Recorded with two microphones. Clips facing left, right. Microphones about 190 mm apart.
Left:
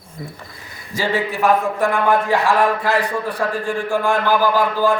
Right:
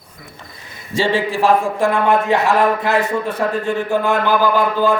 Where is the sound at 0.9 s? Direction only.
25° right (ahead or behind).